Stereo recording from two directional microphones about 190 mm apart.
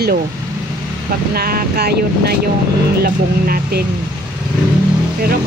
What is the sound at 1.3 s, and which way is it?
Speech, 55° right (ahead or behind).